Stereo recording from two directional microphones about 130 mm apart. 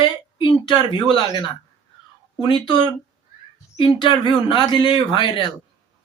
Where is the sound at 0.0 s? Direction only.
35° left (ahead or behind).